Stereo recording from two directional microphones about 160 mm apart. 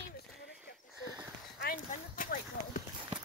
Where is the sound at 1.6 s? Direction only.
60° left (ahead or behind).